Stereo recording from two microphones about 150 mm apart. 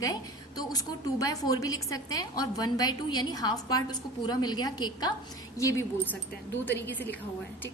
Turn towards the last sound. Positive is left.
turn(degrees=10)  # may be behind; listen again after turning